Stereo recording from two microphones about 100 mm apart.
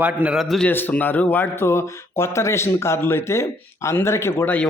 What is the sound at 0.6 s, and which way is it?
Speech, 20° left (ahead or behind).